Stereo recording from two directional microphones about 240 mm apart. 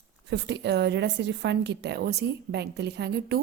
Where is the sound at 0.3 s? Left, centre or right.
Right.